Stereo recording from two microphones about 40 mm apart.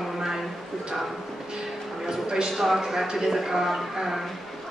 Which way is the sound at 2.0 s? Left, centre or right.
Centre.